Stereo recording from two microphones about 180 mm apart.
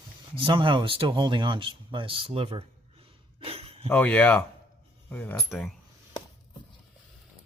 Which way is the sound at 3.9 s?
5° left (ahead or behind).